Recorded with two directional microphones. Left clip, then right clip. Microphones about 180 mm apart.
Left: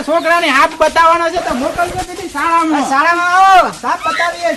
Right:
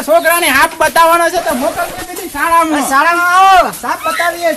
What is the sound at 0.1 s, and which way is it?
Speech, 65° right (ahead or behind).